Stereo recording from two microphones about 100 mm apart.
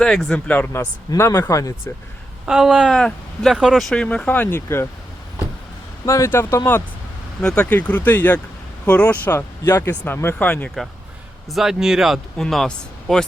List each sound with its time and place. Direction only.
0.0 s speech: 5° left (ahead or behind); by 1.7 s 35° left (ahead or behind)
2.5 s speech: 5° right (ahead or behind)
2.8 s speech: 5° left (ahead or behind)
4.3 s speech: 20° left (ahead or behind)
6.1 s speech: 30° left (ahead or behind)
7.4 s speech: 10° left (ahead or behind)
11.5 s speech: 5° right (ahead or behind)